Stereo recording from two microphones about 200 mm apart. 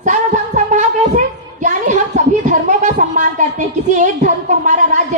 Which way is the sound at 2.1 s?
35° right (ahead or behind).